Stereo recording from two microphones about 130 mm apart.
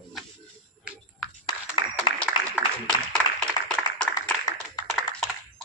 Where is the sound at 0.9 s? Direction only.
10° right (ahead or behind).